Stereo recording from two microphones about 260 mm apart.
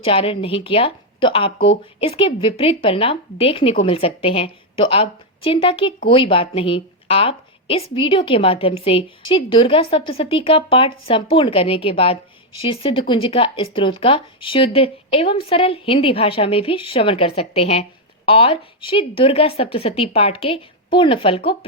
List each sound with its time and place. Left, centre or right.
0.0 s a woman's voice: left